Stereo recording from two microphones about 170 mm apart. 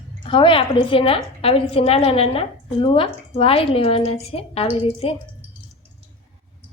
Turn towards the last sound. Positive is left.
turn(degrees=35)  # may be behind; listen again after turning